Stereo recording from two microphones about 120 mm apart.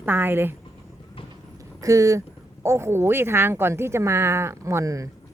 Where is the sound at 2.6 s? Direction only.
20° right (ahead or behind).